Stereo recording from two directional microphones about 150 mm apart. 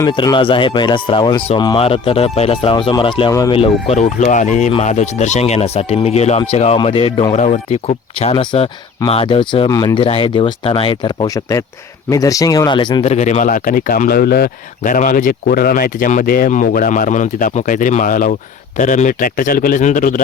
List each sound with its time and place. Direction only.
0.1 s speech: 30° left (ahead or behind)
7.3 s speech: 50° left (ahead or behind); by 13.1 s 30° left (ahead or behind)
13.1 s speech: 50° left (ahead or behind)